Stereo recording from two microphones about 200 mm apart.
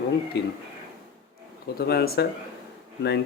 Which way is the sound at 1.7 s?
50° left (ahead or behind).